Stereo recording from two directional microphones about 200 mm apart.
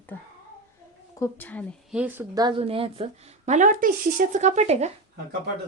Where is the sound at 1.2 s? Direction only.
10° left (ahead or behind).